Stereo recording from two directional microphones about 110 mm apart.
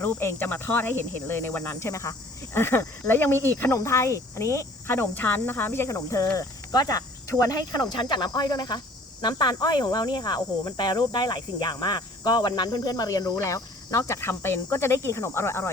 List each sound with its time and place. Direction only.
0.0 s speech: 20° left (ahead or behind)